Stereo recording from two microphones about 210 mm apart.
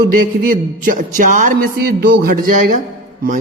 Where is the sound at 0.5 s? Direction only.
40° right (ahead or behind).